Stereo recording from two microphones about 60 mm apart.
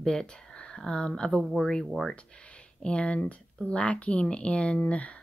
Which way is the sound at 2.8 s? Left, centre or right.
Centre.